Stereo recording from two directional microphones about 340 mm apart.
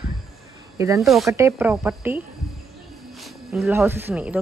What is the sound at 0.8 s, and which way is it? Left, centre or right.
Speech, centre.